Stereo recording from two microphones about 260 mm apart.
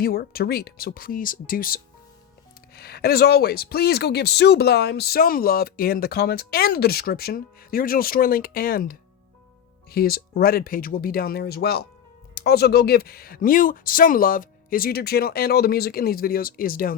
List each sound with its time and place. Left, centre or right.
0.0 s speech: left